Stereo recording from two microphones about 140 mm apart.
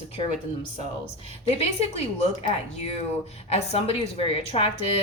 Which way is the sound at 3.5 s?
45° left (ahead or behind).